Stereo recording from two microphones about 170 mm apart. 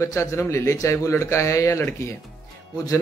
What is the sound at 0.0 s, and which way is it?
A man's voice, 20° left (ahead or behind).